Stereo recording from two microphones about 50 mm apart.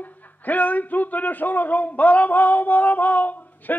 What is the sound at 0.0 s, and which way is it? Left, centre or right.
Speech, left.